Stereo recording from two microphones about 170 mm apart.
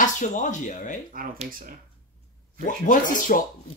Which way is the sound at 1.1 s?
55° right (ahead or behind).